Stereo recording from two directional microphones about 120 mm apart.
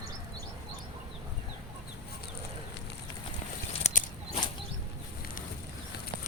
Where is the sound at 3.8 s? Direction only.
90° left.